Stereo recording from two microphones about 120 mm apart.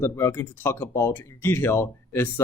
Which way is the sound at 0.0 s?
20° left (ahead or behind).